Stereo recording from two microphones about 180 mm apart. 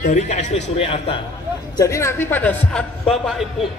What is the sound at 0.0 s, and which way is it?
A man's voice, 45° left (ahead or behind).